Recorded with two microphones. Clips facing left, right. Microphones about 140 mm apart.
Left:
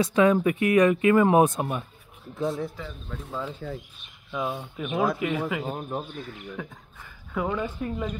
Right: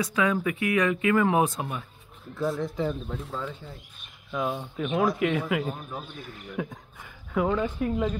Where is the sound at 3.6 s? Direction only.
65° left (ahead or behind).